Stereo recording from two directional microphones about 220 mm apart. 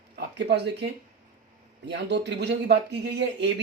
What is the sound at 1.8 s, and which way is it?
Speech, 50° right (ahead or behind).